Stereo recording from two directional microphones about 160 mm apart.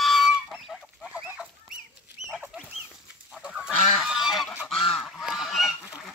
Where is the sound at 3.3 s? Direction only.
5° right (ahead or behind).